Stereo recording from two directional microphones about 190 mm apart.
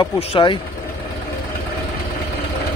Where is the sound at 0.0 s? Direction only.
25° left (ahead or behind).